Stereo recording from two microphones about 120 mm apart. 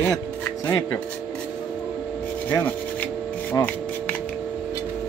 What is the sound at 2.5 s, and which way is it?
Rub, 15° left (ahead or behind).